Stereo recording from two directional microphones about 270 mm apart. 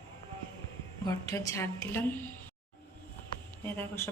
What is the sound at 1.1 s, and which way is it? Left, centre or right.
A woman's voice, centre.